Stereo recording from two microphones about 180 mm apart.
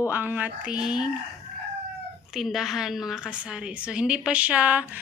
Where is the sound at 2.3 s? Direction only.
Centre (ahead or behind).